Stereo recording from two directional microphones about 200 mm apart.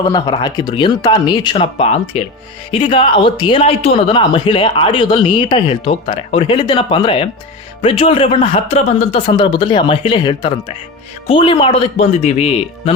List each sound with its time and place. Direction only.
0.0 s a man's voice: 20° left (ahead or behind)